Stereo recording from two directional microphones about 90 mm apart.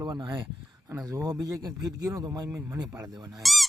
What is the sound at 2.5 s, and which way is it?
Speech, 25° right (ahead or behind).